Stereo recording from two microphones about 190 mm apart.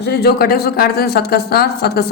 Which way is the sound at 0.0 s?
60° left (ahead or behind).